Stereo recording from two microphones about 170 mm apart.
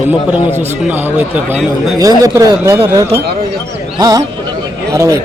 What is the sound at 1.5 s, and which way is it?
A man's voice, 20° right (ahead or behind).